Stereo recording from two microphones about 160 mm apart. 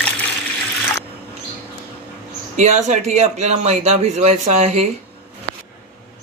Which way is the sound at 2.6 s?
45° right (ahead or behind).